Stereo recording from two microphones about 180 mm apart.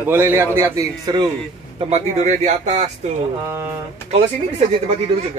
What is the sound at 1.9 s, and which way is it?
Speech, 40° right (ahead or behind).